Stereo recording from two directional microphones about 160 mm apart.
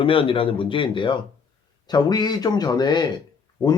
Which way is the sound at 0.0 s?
35° left (ahead or behind).